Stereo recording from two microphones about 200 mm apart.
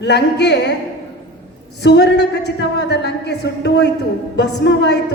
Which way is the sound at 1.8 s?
60° left (ahead or behind).